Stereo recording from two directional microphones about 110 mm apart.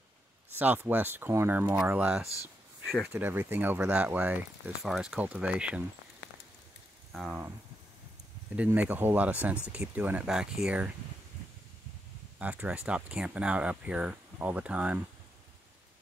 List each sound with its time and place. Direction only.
0.6 s speech: 15° right (ahead or behind)
2.2 s speech: 30° left (ahead or behind)
2.9 s speech: 5° right (ahead or behind)
3.2 s speech: 20° right (ahead or behind)
4.8 s speech: centre (ahead or behind)
5.2 s speech: 15° right (ahead or behind)
7.1 s speech: centre (ahead or behind)
8.5 s speech: 15° right (ahead or behind)
12.4 s speech: 10° right (ahead or behind)